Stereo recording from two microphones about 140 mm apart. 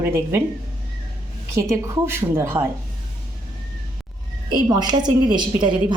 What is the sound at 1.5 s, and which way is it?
A woman's voice, 20° right (ahead or behind).